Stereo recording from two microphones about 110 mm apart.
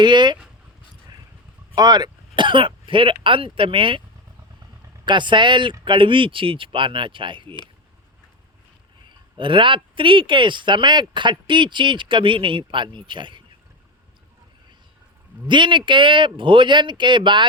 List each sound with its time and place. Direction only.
0.0 s speech: 45° right (ahead or behind)
1.7 s speech: 40° right (ahead or behind)
5.0 s speech: 45° right (ahead or behind)
9.0 s speech: 50° right (ahead or behind)
15.4 s speech: 45° right (ahead or behind)